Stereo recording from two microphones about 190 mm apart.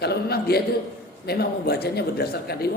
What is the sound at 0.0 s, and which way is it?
A man's voice, 60° left (ahead or behind).